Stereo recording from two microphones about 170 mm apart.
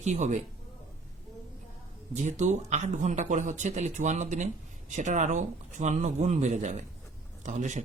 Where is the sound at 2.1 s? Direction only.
45° right (ahead or behind).